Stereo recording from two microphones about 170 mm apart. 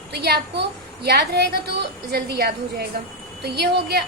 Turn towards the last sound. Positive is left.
turn(degrees=-70)  # may be behind; listen again after turning